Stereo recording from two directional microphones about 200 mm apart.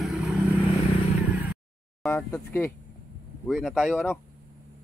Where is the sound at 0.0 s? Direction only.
Centre (ahead or behind).